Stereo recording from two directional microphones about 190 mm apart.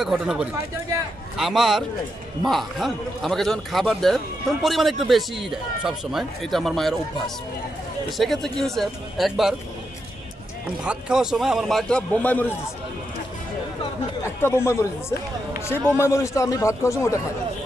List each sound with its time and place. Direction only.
0.0 s a man's voice: 5° right (ahead or behind)
8.2 s a man's voice: centre (ahead or behind)
10.8 s a man's voice: 5° right (ahead or behind)
14.4 s a man's voice: 15° left (ahead or behind)